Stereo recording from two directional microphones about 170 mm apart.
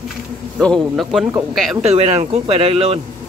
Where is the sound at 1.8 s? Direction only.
40° right (ahead or behind).